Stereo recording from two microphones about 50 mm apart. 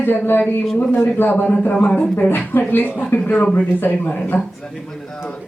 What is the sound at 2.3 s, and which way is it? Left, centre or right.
Speech, left.